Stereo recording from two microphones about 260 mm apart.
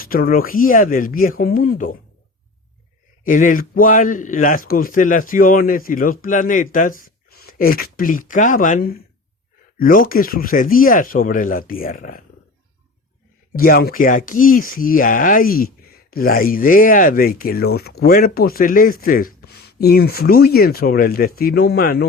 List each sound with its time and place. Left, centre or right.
0.0 s speech: left
3.2 s speech: left
13.6 s speech: left